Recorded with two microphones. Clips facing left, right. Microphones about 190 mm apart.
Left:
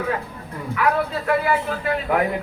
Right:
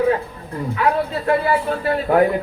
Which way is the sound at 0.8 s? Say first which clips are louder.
Right 1 dB; 30° right (ahead or behind).